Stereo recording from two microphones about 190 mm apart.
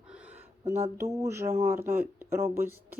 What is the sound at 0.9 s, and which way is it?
Speech, 15° right (ahead or behind).